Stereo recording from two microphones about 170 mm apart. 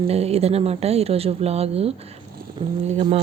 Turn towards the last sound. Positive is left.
turn(degrees=-35)  # may be behind; listen again after turning